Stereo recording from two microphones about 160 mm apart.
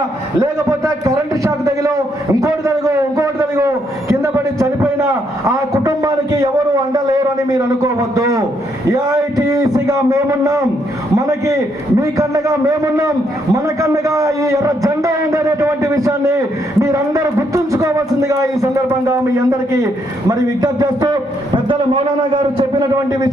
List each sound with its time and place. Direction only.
0.3 s a sound: 20° right (ahead or behind)
6.9 s a man's voice: 25° right (ahead or behind)
11.9 s a man's voice: 20° right (ahead or behind)
20.6 s a man's voice: 25° right (ahead or behind)